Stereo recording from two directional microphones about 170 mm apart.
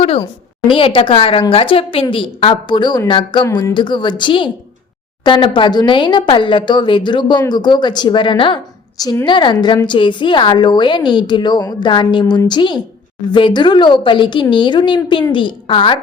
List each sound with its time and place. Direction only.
0.0 s a woman's voice: 35° left (ahead or behind)